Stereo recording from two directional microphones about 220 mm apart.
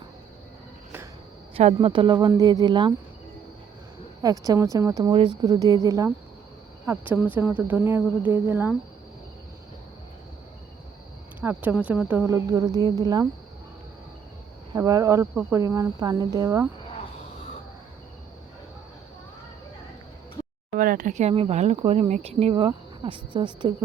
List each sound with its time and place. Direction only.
1.5 s speech: 25° right (ahead or behind)
4.2 s speech: 15° right (ahead or behind)
7.1 s speech: 10° right (ahead or behind)
11.3 s speech: 10° right (ahead or behind)
14.7 s speech: 15° right (ahead or behind)
20.7 s speech: 40° right (ahead or behind); by 23.5 s 20° right (ahead or behind)